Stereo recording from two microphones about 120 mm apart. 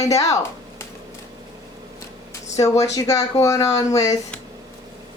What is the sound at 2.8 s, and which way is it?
Speech, 30° left (ahead or behind).